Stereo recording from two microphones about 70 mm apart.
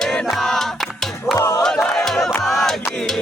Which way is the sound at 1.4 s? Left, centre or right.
Left.